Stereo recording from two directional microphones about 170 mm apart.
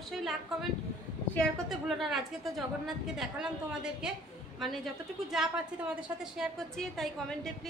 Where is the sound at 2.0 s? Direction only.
Centre (ahead or behind).